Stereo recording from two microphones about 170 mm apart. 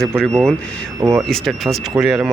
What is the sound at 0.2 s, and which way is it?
Speech, 5° left (ahead or behind).